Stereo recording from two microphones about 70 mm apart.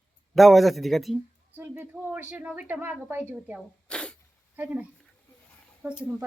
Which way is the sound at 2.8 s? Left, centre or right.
Right.